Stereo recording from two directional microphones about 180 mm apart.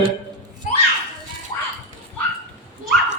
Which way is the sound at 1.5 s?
25° left (ahead or behind).